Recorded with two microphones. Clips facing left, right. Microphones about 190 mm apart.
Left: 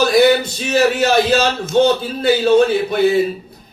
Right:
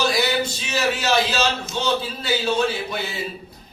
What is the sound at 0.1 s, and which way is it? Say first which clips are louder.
A man's voice: left 10 dB; 55° left (ahead or behind).